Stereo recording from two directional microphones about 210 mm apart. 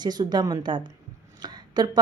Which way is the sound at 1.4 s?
20° right (ahead or behind).